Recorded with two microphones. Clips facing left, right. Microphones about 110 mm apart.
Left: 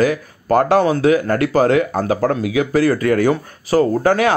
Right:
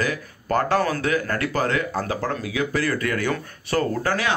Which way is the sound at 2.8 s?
40° left (ahead or behind).